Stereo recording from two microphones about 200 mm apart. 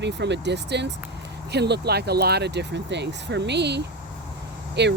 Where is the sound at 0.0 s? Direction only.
60° right (ahead or behind).